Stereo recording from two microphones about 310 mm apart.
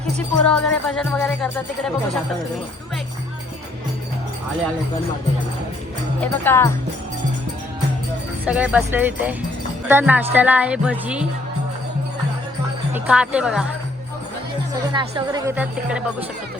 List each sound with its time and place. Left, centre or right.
0.4 s music: centre
6.1 s speech: centre
8.4 s music: centre
12.9 s a woman's voice: centre
14.9 s music: centre